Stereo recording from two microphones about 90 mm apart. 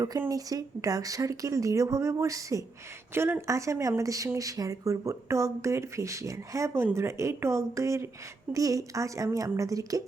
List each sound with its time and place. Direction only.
0.3 s speech: 40° right (ahead or behind)